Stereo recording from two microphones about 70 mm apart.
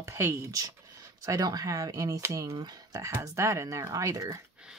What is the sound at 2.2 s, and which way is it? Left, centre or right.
Speech, right.